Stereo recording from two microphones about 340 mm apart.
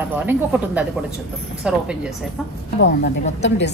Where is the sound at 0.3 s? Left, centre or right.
Centre.